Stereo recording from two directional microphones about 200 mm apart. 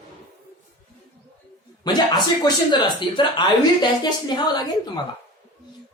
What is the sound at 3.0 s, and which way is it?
Speech, 25° left (ahead or behind).